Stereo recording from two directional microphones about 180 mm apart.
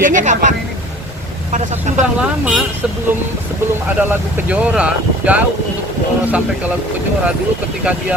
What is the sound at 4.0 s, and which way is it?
Speech, 10° right (ahead or behind).